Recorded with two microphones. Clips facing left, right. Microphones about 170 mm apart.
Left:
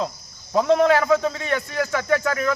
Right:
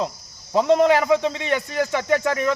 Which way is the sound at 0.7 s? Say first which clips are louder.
Right 1 dB; 20° right (ahead or behind).